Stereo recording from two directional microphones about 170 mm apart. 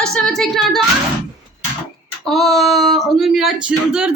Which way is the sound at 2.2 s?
Centre (ahead or behind).